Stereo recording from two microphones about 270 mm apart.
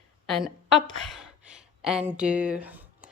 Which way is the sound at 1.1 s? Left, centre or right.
Centre.